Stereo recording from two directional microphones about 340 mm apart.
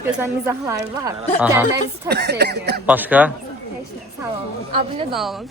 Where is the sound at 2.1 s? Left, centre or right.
Right.